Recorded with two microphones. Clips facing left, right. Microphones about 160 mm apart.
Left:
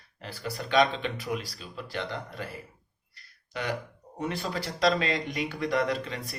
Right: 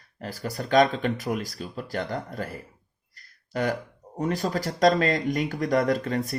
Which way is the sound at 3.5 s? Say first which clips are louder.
Right 6 dB; 45° right (ahead or behind).